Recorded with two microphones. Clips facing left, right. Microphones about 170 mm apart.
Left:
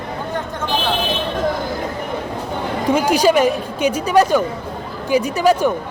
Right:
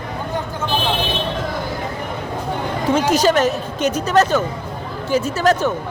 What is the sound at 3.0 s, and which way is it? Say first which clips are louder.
Speech: left 1 dB; 10° left (ahead or behind).